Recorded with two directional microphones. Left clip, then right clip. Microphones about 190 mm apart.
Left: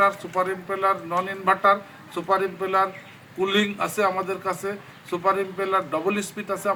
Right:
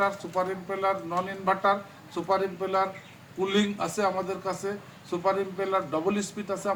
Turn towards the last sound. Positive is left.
turn(degrees=0)  # may be behind; listen again after turning